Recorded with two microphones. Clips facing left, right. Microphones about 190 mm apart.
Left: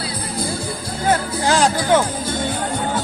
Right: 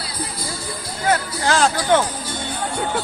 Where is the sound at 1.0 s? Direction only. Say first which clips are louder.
Left 2 dB; 15° left (ahead or behind).